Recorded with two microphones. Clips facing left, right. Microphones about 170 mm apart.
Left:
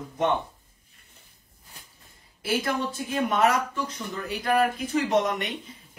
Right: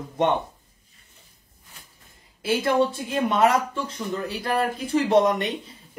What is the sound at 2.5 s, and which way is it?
Speech, 25° right (ahead or behind).